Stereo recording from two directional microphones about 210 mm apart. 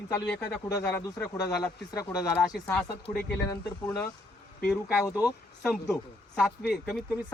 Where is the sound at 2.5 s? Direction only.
5° left (ahead or behind).